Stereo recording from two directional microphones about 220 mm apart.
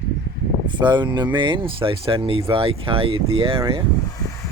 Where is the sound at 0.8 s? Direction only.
20° right (ahead or behind).